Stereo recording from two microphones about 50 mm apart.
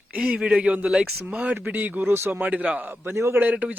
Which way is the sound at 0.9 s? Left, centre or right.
Centre.